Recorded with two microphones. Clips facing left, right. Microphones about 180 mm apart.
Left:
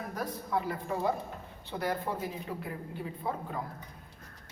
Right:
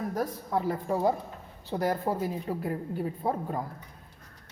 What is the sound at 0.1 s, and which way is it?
A woman's voice, 40° right (ahead or behind).